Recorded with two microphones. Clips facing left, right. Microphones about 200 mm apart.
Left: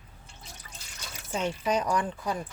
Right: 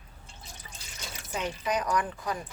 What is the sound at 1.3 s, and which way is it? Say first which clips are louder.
Speech: left 3 dB; 30° left (ahead or behind).